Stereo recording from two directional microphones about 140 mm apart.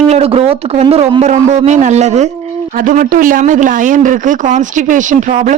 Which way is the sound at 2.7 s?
70° right (ahead or behind).